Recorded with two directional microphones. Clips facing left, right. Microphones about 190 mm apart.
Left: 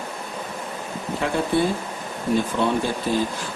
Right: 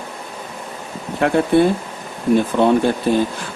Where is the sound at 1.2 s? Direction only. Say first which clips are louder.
Right 8 dB; 65° right (ahead or behind).